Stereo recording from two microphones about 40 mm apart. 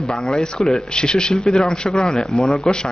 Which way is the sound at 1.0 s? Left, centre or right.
Centre.